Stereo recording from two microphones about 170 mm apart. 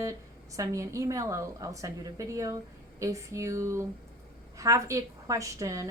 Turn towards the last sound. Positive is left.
turn(degrees=-20)  # may be behind; listen again after turning